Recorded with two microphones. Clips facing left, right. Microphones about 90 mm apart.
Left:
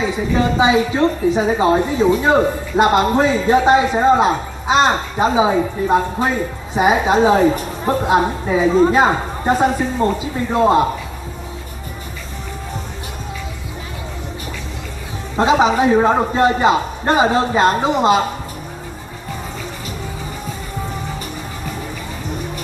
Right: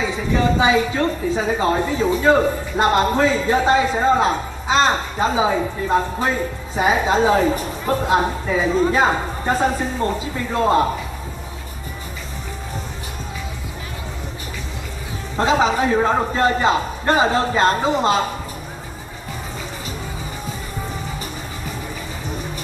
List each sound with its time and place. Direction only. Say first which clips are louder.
0.0 s a man's voice: left 2 dB; 20° left (ahead or behind)
15.3 s a man's voice: left 3 dB; 20° left (ahead or behind)